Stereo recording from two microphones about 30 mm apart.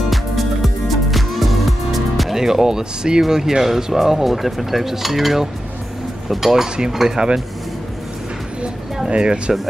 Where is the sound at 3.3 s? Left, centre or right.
Centre.